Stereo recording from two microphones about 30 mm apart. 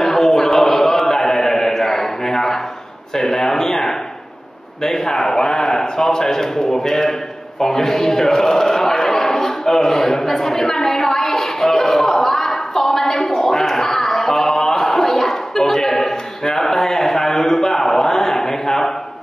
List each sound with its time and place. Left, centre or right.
0.0 s chant: centre
3.2 s a man's voice: centre
7.6 s a sound: centre